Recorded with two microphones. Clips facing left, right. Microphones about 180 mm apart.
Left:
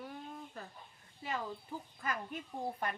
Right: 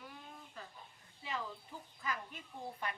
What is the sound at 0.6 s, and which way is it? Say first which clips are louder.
Speech: left 3 dB; 45° left (ahead or behind).